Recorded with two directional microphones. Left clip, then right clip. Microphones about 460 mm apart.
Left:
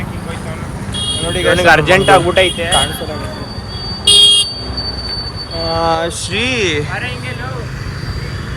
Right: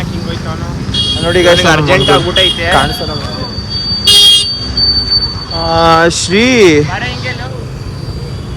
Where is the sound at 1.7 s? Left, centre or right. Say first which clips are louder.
Even; centre.